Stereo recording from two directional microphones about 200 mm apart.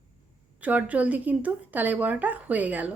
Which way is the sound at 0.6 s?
5° right (ahead or behind).